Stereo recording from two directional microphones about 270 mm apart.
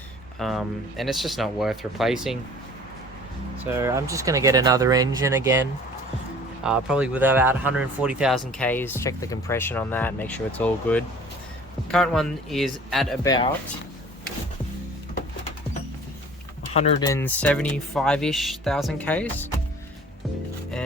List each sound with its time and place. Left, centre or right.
0.3 s speech: centre
3.8 s speech: centre
13.2 s speech: centre
16.7 s speech: left
17.1 s speech: centre